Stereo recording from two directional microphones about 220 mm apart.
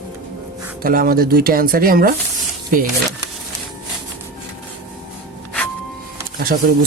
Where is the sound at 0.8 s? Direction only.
40° right (ahead or behind).